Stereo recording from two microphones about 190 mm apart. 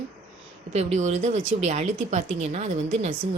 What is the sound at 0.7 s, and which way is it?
Speech, 35° right (ahead or behind).